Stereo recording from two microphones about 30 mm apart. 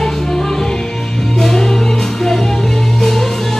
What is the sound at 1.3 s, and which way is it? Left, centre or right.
Music, centre.